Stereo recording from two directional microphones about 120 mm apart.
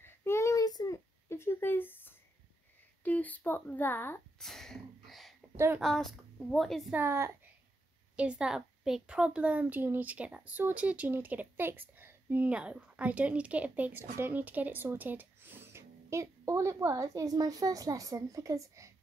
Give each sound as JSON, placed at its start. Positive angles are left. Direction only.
{"t": 0.0, "sound": "a sound", "side_deg": 20}
{"t": 3.0, "sound": "speech", "side_deg": 15}
{"t": 4.4, "sound": "a sound", "side_deg": 5}
{"t": 5.8, "sound": "speech", "side_deg": 0}
{"t": 6.9, "sound": "a woman's voice", "side_deg": -20}
{"t": 8.2, "sound": "a woman's voice", "side_deg": -10}